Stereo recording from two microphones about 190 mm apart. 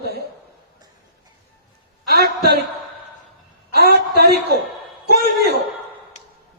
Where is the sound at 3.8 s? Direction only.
60° right (ahead or behind).